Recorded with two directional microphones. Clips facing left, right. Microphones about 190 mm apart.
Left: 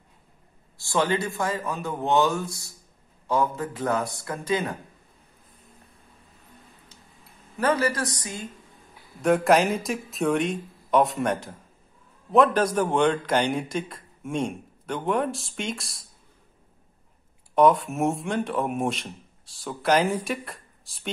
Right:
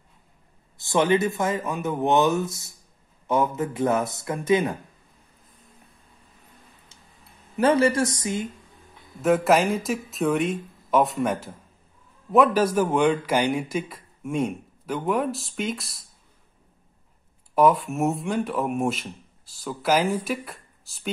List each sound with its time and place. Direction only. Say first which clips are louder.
0.7 s speech: right 4 dB; 20° right (ahead or behind)
7.5 s speech: right 5 dB; 25° right (ahead or behind)
9.2 s a man's voice: even; centre (ahead or behind)
17.6 s a man's voice: even; centre (ahead or behind)